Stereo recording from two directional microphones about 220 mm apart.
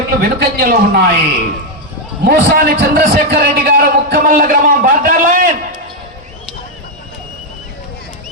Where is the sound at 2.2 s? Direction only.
45° right (ahead or behind).